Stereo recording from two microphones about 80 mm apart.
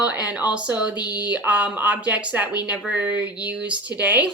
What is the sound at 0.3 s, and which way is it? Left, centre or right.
Speech, centre.